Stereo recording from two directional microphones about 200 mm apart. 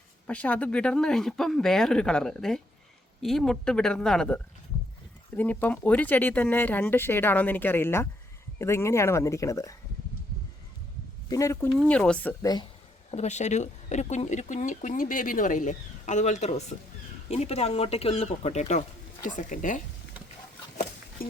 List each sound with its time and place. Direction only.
0.3 s speech: 5° left (ahead or behind)
5.4 s speech: 10° left (ahead or behind)
11.3 s speech: 15° left (ahead or behind)
11.8 s speech: 5° left (ahead or behind)
12.4 s speech: 20° left (ahead or behind)
13.1 s speech: 35° left (ahead or behind)
21.2 s speech: 45° left (ahead or behind)